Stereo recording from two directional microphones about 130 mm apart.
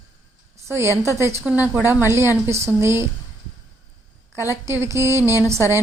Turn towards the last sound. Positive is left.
turn(degrees=-20)  # may be behind; listen again after turning